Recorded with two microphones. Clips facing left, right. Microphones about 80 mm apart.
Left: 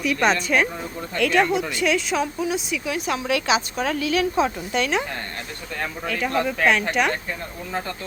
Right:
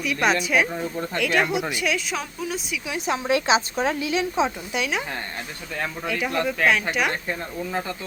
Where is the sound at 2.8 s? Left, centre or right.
Right.